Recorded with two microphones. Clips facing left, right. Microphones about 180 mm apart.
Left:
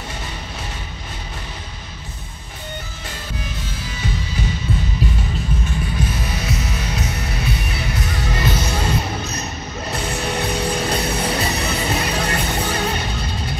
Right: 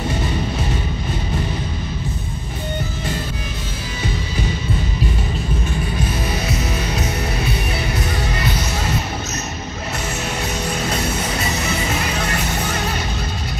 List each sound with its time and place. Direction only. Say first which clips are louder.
10.1 s music: left 4 dB; 35° left (ahead or behind)